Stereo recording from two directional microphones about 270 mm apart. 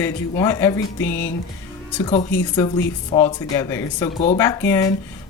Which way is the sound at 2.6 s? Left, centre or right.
Centre.